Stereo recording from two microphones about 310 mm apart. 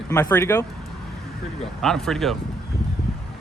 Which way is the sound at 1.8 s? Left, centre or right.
Centre.